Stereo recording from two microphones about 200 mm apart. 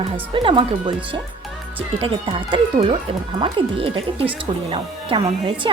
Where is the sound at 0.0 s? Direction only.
25° right (ahead or behind).